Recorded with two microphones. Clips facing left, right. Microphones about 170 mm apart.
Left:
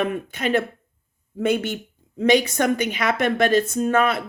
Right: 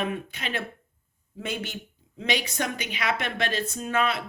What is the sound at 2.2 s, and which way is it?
A woman's voice, 50° left (ahead or behind).